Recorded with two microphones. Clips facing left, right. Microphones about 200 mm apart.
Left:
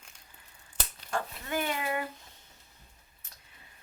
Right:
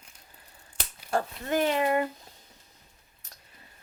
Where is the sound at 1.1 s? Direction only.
40° right (ahead or behind).